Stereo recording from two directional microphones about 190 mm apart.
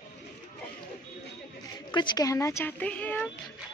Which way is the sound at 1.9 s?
20° left (ahead or behind).